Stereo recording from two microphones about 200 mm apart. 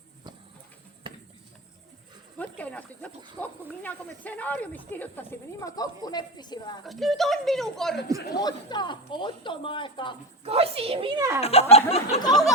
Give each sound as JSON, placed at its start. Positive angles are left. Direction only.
{"t": 2.4, "sound": "speech", "side_deg": 5}
{"t": 6.8, "sound": "speech", "side_deg": 0}
{"t": 8.4, "sound": "speech", "side_deg": 20}
{"t": 10.4, "sound": "a woman's voice", "side_deg": -30}
{"t": 11.3, "sound": "speech", "side_deg": 30}